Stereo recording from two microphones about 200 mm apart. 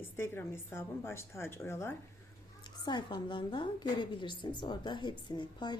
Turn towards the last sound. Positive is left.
turn(degrees=20)  # may be behind; listen again after turning